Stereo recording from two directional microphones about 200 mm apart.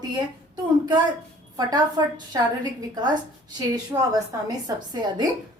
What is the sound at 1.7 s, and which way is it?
A woman's voice, 20° right (ahead or behind).